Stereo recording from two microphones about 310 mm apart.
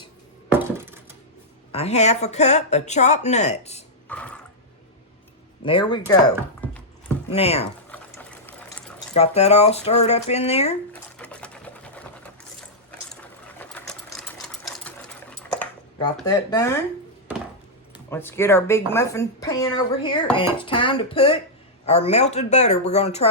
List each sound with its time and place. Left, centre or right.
0.5 s dishes: centre
1.7 s speech: left
4.1 s drip: centre
5.6 s speech: centre
7.3 s speech: centre
7.9 s sewing machine: centre
9.1 s speech: left
11.2 s sewing machine: centre
13.6 s sewing machine: centre
16.2 s speech: centre
18.1 s speech: centre